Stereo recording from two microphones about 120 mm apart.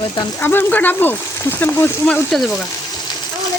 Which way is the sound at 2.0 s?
5° left (ahead or behind).